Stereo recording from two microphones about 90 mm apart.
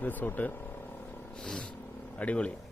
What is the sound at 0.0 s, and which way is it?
Vehicle, 20° left (ahead or behind).